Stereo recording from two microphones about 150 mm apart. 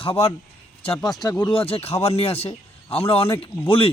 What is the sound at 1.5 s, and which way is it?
A man's voice, 40° left (ahead or behind).